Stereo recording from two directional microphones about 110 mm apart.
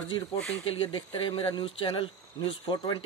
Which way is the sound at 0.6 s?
55° left (ahead or behind).